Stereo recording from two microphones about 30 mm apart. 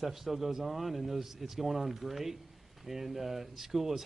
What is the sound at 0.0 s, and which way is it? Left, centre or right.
Speech, centre.